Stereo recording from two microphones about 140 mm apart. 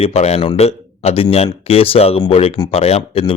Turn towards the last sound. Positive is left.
turn(degrees=45)  # may be behind; listen again after turning